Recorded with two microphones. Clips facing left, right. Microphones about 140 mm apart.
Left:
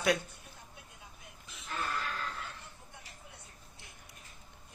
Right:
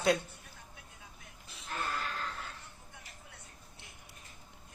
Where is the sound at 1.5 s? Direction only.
30° right (ahead or behind).